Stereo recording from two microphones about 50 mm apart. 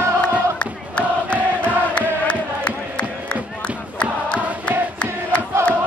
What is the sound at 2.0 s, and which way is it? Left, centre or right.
Music, left.